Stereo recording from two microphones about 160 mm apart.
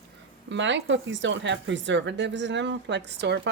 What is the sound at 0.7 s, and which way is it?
Speech, 90° right.